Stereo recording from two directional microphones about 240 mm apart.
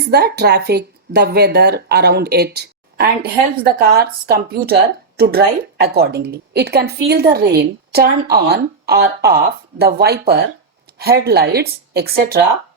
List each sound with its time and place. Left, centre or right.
0.0 s speech: right